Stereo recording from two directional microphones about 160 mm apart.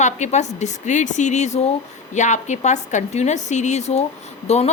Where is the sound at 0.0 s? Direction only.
45° left (ahead or behind).